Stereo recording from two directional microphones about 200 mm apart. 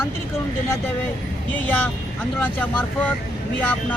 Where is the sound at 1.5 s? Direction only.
10° left (ahead or behind).